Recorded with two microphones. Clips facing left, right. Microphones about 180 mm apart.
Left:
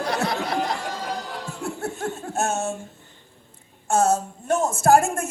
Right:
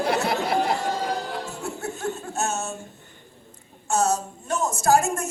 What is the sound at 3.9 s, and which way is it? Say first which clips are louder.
A woman's voice: left 3 dB; 55° left (ahead or behind).